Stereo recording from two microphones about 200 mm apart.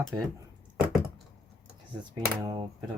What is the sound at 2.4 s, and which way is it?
Speech, 20° right (ahead or behind).